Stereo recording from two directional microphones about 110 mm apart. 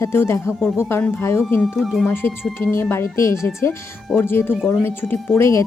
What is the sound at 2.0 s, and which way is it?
A woman's voice, 20° left (ahead or behind).